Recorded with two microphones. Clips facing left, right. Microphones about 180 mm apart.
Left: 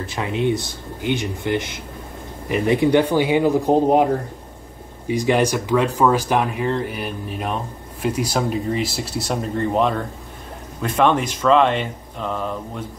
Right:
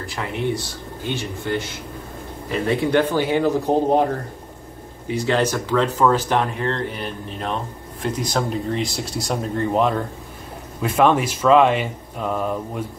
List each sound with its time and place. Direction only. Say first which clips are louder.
0.0 s speech: left 3 dB; 20° left (ahead or behind); by 12.8 s 10° right (ahead or behind)